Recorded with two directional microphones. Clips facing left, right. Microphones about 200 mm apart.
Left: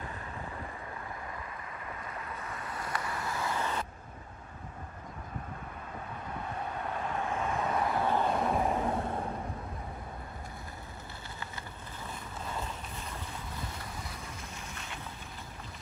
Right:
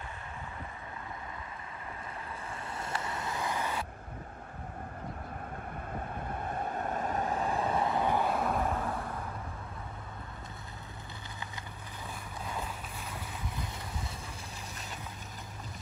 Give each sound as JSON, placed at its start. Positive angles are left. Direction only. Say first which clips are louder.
{"t": 2.5, "sound": "vehicle", "louder": "even", "side_deg": -25}
{"t": 6.4, "sound": "vehicle", "louder": "right 2 dB", "side_deg": -50}
{"t": 8.3, "sound": "vehicle", "louder": "left 1 dB", "side_deg": 0}
{"t": 8.6, "sound": "vehicle", "louder": "left 3 dB", "side_deg": 20}